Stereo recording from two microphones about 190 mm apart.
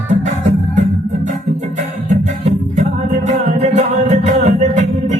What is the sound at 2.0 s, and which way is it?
Music, 40° right (ahead or behind).